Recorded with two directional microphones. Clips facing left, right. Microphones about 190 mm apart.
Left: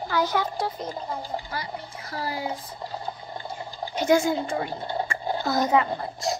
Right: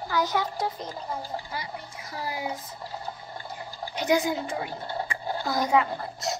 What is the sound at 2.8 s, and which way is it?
Water, 20° left (ahead or behind).